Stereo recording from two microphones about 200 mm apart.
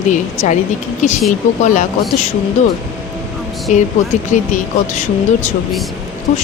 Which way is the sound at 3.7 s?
40° left (ahead or behind).